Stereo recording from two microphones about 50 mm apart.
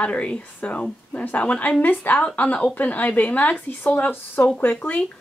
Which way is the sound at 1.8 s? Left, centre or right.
Left.